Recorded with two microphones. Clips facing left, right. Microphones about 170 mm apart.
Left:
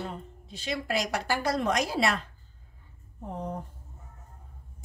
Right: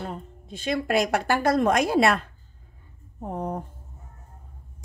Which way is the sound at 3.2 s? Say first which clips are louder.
Right 5 dB; 55° right (ahead or behind).